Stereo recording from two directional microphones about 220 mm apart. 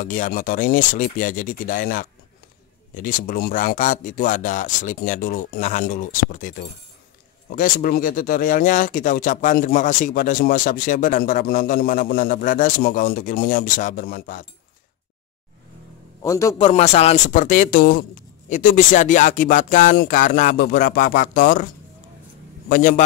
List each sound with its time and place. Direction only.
0.0 s speech: 35° left (ahead or behind)
16.2 s a man's voice: 15° left (ahead or behind)
16.6 s speech: 30° left (ahead or behind)
22.7 s speech: 35° left (ahead or behind)